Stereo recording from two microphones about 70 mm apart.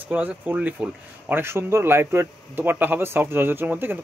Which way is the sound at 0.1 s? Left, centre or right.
Right.